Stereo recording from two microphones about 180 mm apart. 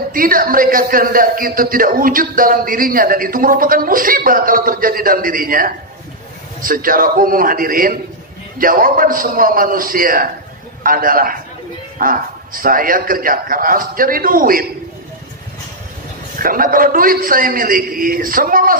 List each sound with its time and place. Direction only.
0.1 s a man's voice: 50° right (ahead or behind)
16.3 s a man's voice: 50° right (ahead or behind)